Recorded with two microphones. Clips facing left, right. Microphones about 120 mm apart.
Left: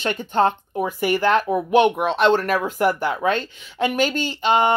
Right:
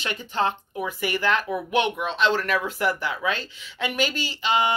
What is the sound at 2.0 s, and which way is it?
Speech, 60° left (ahead or behind).